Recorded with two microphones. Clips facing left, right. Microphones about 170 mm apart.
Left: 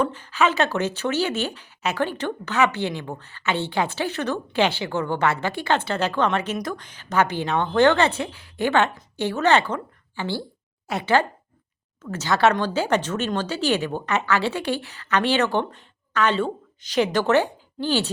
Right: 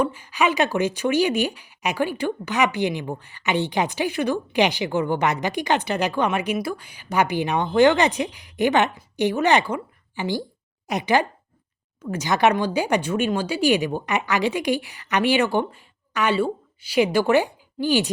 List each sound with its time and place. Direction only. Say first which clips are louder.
0.0 s speech: even; 10° right (ahead or behind)